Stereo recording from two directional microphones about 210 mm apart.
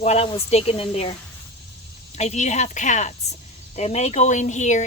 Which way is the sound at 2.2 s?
35° left (ahead or behind).